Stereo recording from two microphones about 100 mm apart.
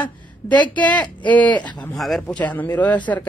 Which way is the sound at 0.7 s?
15° left (ahead or behind).